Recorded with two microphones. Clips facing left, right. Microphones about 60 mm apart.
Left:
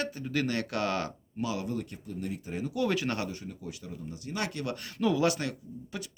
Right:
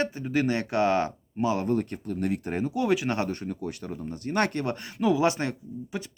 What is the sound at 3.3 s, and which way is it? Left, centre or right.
Speech, right.